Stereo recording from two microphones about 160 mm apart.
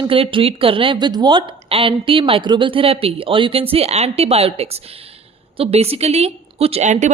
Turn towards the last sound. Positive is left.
turn(degrees=-45)  # may be behind; listen again after turning